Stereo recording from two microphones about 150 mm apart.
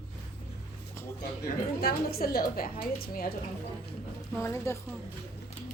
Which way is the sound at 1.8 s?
90° left.